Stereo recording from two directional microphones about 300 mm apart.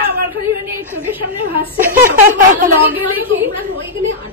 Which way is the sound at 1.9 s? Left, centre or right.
Right.